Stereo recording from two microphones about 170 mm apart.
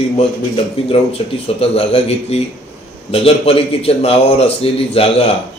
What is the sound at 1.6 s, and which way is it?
A man's voice, 35° left (ahead or behind).